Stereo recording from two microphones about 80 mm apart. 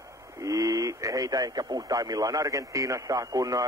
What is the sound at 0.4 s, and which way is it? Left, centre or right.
Speech, right.